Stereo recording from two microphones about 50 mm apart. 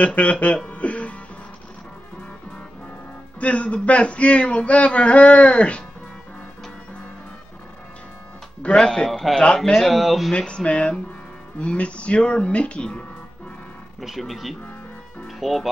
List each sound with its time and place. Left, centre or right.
0.0 s speech: left
0.7 s music: left
3.3 s speech: left
8.8 s a man's voice: centre
10.3 s speech: centre
14.0 s speech: centre